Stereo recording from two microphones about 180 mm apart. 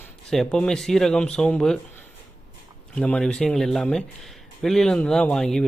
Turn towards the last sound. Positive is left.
turn(degrees=5)  # may be behind; listen again after turning